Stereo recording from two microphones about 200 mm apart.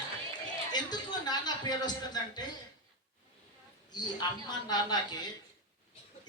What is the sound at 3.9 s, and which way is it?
A man's voice, 20° left (ahead or behind).